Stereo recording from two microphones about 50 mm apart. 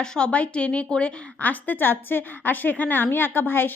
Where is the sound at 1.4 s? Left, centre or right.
Left.